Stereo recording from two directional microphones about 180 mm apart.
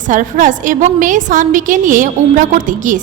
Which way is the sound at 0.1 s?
45° right (ahead or behind).